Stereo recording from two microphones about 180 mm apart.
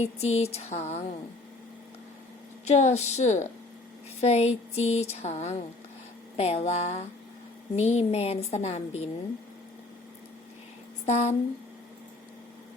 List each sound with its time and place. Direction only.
0.0 s speech: 35° left (ahead or behind)
2.6 s speech: 40° left (ahead or behind)
11.0 s speech: 40° left (ahead or behind)